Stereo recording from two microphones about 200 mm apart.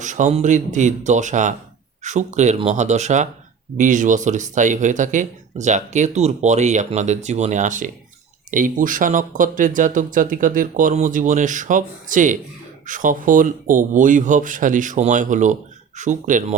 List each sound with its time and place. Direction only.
0.0 s speech: 40° right (ahead or behind)